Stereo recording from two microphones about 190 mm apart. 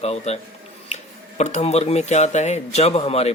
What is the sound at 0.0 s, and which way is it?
Speech, 35° left (ahead or behind).